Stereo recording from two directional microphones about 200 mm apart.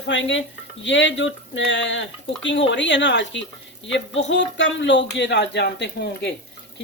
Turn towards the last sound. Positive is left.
turn(degrees=55)  # may be behind; listen again after turning